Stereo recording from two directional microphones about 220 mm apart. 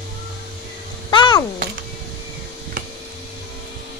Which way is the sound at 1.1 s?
20° left (ahead or behind).